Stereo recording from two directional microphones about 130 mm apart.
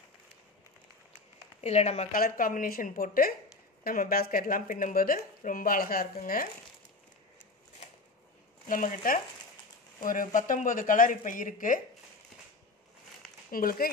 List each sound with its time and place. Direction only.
1.6 s speech: 55° left (ahead or behind); by 6.5 s 90° left
8.6 s speech: 90° left
13.5 s speech: 90° left